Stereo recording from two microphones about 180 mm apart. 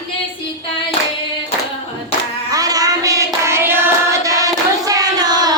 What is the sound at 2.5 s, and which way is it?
Child singing, 20° right (ahead or behind).